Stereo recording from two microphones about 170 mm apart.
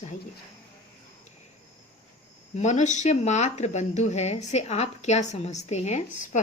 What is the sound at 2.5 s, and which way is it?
Speech, 45° left (ahead or behind).